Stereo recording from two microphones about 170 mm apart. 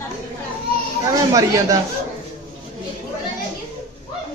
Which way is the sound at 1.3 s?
20° right (ahead or behind).